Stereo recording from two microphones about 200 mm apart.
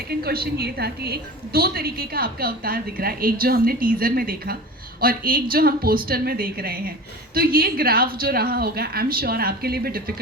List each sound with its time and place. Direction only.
0.1 s a woman's voice: 50° right (ahead or behind)